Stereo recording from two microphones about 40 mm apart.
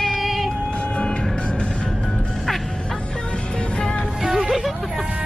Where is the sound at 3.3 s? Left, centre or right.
Left.